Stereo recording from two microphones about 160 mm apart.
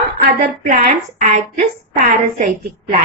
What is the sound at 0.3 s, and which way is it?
Speech, 70° right (ahead or behind).